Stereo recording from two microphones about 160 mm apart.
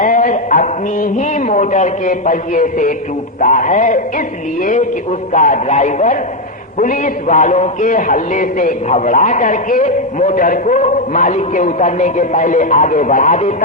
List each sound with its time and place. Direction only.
0.0 s a man's voice: 60° left (ahead or behind)
5.3 s a man's voice: 55° left (ahead or behind)